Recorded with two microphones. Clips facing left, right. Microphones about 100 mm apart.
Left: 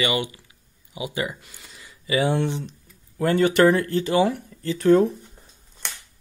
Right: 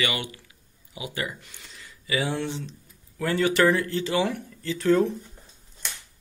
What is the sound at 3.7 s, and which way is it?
Speech, 50° left (ahead or behind).